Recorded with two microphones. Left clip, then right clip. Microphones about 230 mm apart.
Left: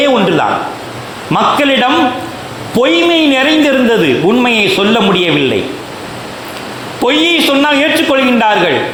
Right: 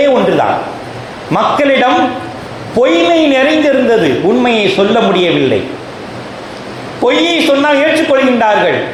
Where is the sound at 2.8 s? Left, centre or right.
Left.